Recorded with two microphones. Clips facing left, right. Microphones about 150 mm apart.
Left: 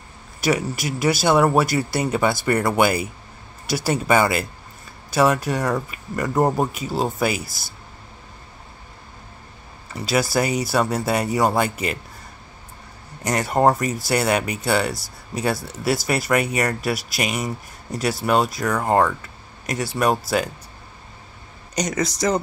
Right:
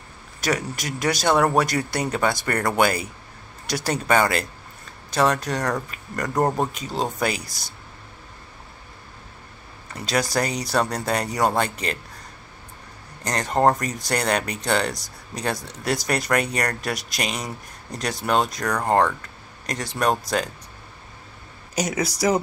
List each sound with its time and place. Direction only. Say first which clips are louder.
0.4 s speech: left 4 dB; 10° left (ahead or behind)
9.9 s speech: left 3 dB; 5° left (ahead or behind)
13.2 s speech: left 2 dB; 10° left (ahead or behind)
21.7 s speech: left 1 dB; 5° right (ahead or behind)